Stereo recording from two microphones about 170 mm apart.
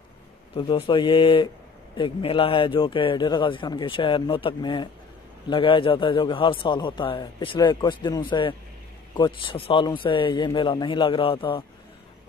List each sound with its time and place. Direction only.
0.6 s speech: 25° left (ahead or behind)